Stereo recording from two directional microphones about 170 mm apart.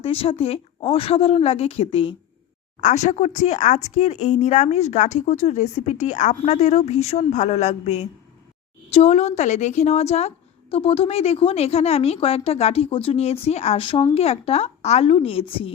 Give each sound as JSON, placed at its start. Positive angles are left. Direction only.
{"t": 0.0, "sound": "a woman's voice", "side_deg": 35}